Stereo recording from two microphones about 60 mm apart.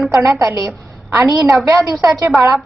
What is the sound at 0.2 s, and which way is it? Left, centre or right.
A woman's voice, right.